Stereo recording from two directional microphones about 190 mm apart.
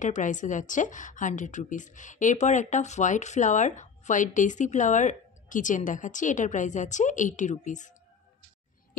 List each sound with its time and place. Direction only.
0.0 s a woman's voice: 40° left (ahead or behind)